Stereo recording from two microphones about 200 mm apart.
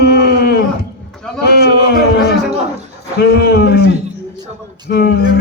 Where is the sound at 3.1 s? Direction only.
55° left (ahead or behind).